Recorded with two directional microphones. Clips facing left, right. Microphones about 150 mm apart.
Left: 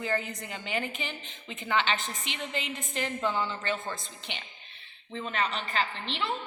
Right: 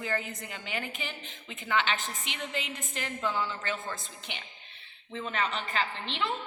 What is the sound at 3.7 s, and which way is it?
Speech, 20° left (ahead or behind).